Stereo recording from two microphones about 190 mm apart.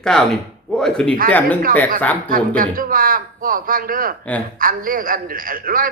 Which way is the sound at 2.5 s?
45° right (ahead or behind).